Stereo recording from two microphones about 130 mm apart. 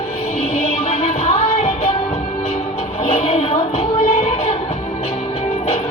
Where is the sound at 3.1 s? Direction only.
55° left (ahead or behind).